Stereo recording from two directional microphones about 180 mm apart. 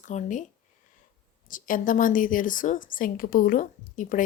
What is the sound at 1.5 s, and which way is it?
A woman's voice, 50° left (ahead or behind).